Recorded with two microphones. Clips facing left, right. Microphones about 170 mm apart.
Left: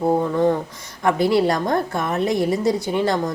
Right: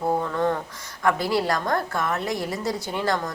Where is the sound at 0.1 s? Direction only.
15° left (ahead or behind).